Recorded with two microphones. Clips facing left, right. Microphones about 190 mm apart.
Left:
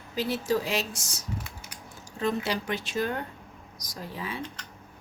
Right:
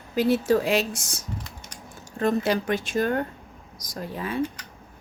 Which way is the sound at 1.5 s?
10° left (ahead or behind).